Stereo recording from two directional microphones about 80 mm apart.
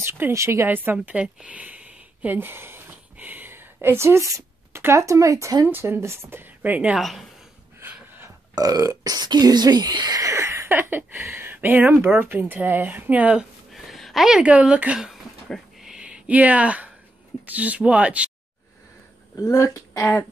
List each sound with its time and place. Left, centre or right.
0.0 s a woman's voice: right
0.7 s speech: right
1.0 s speech: centre; by 5.7 s right
5.7 s speech: right
7.0 s a woman's voice: centre
7.8 s a sound: right
8.5 s speech: right; by 13.5 s centre
13.7 s a sound: centre
14.4 s speech: centre
15.8 s a sound: centre
17.5 s speech: centre
19.3 s speech: left